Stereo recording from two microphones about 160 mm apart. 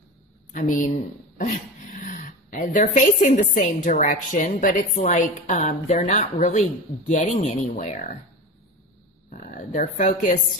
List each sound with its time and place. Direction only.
0.5 s a woman's voice: 50° left (ahead or behind)
1.4 s dog: 55° left (ahead or behind)
3.5 s a woman's voice: 50° left (ahead or behind)
9.3 s speech: 55° left (ahead or behind)